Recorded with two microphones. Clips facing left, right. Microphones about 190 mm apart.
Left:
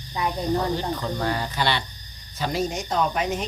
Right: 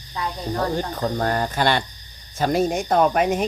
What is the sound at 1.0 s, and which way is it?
Speech, 50° right (ahead or behind).